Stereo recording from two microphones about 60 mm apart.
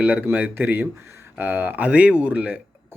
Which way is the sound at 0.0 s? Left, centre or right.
Right.